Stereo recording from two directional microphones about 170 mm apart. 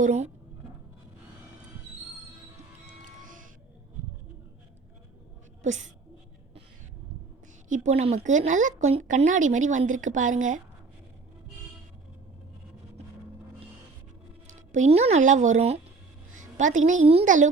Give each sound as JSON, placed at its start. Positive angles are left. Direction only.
{"t": 0.0, "sound": "speech", "side_deg": -40}
{"t": 2.8, "sound": "music", "side_deg": -50}
{"t": 5.6, "sound": "speech", "side_deg": -45}
{"t": 7.7, "sound": "speech", "side_deg": -40}
{"t": 14.4, "sound": "a woman's voice", "side_deg": -45}